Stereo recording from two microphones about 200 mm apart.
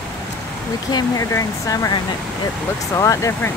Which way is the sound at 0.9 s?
15° left (ahead or behind).